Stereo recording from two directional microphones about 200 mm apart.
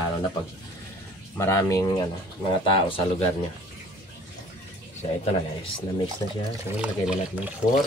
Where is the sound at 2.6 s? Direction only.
25° left (ahead or behind).